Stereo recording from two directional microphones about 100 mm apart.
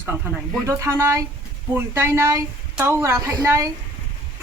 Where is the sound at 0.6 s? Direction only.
30° right (ahead or behind).